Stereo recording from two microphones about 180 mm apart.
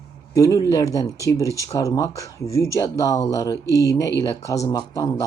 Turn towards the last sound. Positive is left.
turn(degrees=20)  # may be behind; listen again after turning